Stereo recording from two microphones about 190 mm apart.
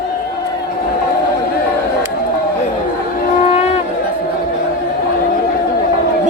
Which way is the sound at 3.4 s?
35° left (ahead or behind).